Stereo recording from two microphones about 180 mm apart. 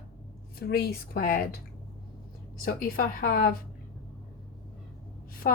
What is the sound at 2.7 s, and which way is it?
Speech, 55° left (ahead or behind).